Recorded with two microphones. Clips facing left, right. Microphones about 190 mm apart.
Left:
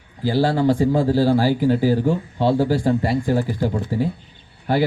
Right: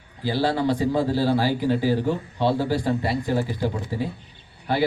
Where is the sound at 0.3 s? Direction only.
45° left (ahead or behind).